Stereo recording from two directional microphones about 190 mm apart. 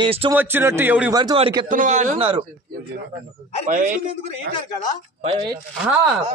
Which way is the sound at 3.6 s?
45° right (ahead or behind).